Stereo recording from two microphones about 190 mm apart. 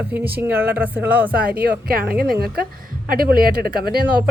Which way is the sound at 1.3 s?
55° right (ahead or behind).